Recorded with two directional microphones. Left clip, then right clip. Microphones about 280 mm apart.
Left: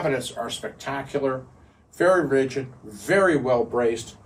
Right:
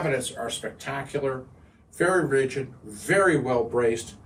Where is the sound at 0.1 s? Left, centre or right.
Centre.